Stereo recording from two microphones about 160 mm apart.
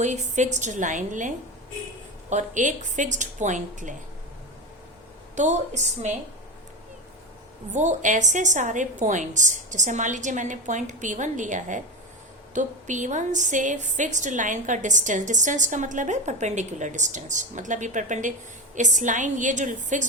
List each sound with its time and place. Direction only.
0.0 s a woman's voice: 45° right (ahead or behind)
2.3 s a woman's voice: 50° right (ahead or behind)
5.3 s a woman's voice: 50° right (ahead or behind)
7.7 s a woman's voice: 50° right (ahead or behind)